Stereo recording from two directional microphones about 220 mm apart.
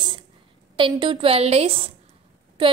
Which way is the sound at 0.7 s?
20° right (ahead or behind).